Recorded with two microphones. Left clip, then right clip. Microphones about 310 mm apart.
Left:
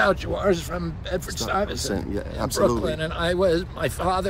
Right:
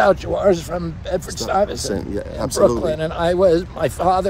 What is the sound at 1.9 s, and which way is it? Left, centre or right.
Speech, centre.